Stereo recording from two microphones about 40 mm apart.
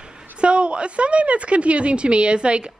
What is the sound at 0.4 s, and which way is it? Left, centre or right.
A woman's voice, right.